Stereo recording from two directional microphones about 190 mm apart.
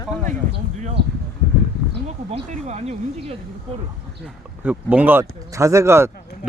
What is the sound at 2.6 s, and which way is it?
Speech, 35° right (ahead or behind).